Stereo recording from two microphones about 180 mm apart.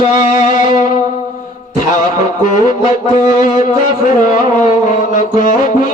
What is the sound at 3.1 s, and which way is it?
Music, 45° left (ahead or behind).